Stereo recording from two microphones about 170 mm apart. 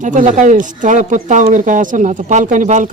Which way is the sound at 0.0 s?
45° right (ahead or behind).